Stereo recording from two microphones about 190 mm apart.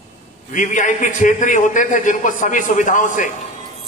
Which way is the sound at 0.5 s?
40° left (ahead or behind).